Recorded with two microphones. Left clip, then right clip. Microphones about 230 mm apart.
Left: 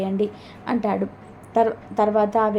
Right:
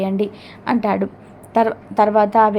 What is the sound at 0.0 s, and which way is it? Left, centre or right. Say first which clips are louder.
A woman's voice: right 3 dB; centre.